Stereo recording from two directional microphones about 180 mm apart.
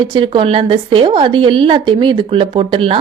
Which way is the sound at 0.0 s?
25° right (ahead or behind).